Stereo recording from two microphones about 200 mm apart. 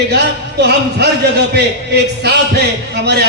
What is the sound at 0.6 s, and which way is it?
Speech, 55° right (ahead or behind).